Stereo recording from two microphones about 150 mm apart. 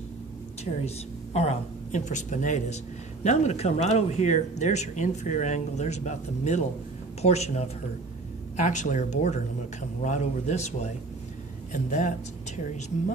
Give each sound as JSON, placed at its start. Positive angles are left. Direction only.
{"t": 0.8, "sound": "speech", "side_deg": 45}